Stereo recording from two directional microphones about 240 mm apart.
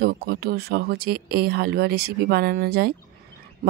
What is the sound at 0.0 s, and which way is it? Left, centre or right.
Speech, right.